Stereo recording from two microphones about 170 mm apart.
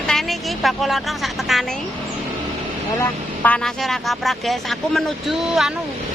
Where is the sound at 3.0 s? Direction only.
10° left (ahead or behind).